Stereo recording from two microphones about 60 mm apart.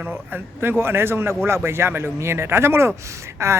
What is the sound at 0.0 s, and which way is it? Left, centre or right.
Speech, right.